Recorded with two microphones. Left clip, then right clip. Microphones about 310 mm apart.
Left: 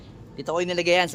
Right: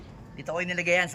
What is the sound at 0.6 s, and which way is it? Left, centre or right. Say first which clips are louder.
Speech: left 3 dB; centre.